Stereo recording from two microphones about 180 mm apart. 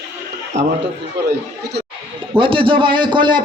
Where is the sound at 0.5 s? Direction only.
40° right (ahead or behind).